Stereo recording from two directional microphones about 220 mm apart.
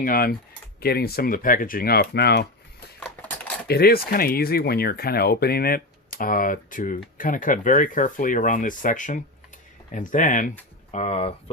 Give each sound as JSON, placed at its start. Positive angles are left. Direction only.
{"t": 0.0, "sound": "speech", "side_deg": 40}
{"t": 3.0, "sound": "a sound", "side_deg": 5}
{"t": 3.7, "sound": "speech", "side_deg": 45}